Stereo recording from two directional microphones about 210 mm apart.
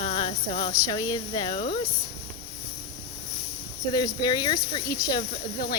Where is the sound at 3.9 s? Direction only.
20° left (ahead or behind).